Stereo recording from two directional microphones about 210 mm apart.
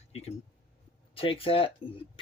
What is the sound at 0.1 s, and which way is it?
Speech, 30° left (ahead or behind).